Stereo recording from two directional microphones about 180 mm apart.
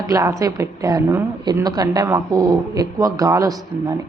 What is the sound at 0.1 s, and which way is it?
A woman's voice, 20° right (ahead or behind).